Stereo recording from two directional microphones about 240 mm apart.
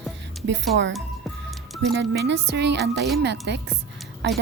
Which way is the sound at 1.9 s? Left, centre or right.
Right.